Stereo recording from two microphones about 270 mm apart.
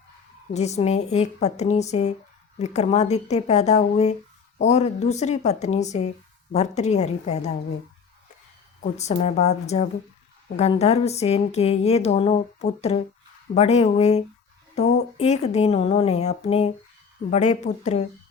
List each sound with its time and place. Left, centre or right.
0.5 s a woman's voice: left
8.8 s a woman's voice: left